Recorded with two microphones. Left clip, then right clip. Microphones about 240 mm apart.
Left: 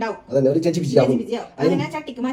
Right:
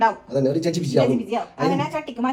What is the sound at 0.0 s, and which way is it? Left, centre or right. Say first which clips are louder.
Speech: even; centre.